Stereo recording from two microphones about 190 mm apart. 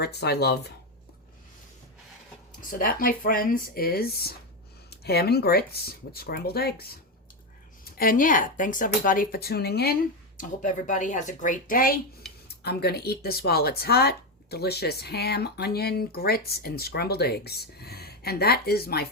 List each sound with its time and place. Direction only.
0.0 s speech: 60° left (ahead or behind)
2.6 s speech: 45° left (ahead or behind)